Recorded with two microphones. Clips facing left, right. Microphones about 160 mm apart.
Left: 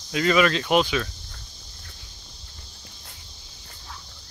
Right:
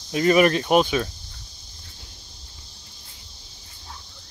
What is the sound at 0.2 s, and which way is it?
Speech, 35° right (ahead or behind).